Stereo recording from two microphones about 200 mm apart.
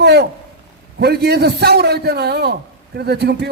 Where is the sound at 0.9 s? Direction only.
55° right (ahead or behind).